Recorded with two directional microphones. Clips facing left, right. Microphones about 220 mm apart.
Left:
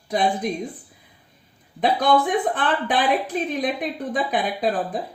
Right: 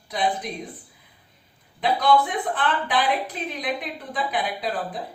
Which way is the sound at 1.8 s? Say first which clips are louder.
Left 1 dB; 45° left (ahead or behind).